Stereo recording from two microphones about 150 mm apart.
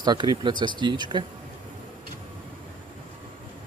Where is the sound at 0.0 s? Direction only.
30° right (ahead or behind).